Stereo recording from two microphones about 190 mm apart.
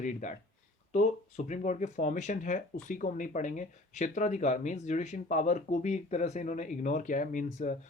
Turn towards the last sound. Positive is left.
turn(degrees=40)  # may be behind; listen again after turning